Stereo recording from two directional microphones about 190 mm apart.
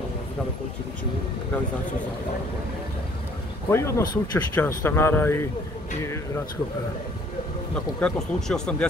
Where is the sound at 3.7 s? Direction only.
15° left (ahead or behind).